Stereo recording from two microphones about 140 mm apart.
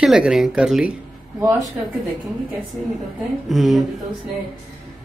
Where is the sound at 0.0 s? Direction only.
5° right (ahead or behind).